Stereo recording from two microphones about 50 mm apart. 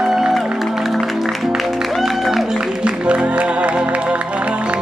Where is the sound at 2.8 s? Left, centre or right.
Right.